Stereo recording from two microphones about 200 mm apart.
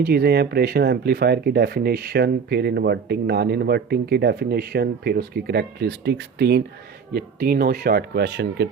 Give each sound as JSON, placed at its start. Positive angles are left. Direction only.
{"t": 0.0, "sound": "speech", "side_deg": -50}